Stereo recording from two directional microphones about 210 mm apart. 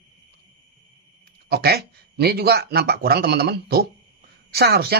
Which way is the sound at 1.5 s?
50° right (ahead or behind).